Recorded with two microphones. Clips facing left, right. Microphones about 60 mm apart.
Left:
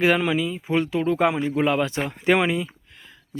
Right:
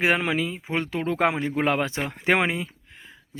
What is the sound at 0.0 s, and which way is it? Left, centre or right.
A man's voice, right.